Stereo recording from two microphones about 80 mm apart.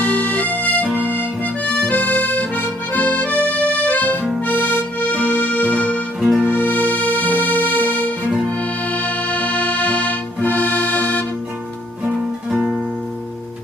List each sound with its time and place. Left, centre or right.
0.0 s music: centre
6.1 s music: centre
6.4 s music: centre
12.5 s music: centre